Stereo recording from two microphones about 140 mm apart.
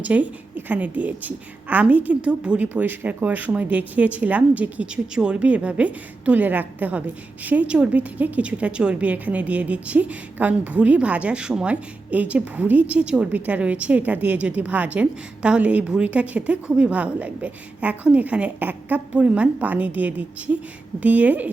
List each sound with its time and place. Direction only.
0.0 s a woman's voice: 10° right (ahead or behind)